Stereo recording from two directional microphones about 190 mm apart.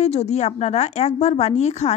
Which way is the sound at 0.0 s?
35° left (ahead or behind).